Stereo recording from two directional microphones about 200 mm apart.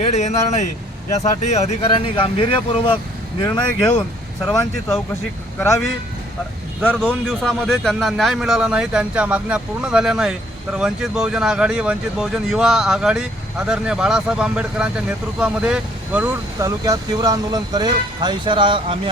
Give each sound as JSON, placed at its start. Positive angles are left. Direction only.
{"t": 0.0, "sound": "speech", "side_deg": 35}
{"t": 3.8, "sound": "a man's voice", "side_deg": 5}
{"t": 4.4, "sound": "speech", "side_deg": 15}
{"t": 6.8, "sound": "a man's voice", "side_deg": 5}